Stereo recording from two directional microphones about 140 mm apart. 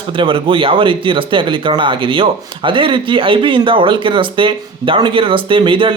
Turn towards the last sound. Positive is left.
turn(degrees=-40)  # may be behind; listen again after turning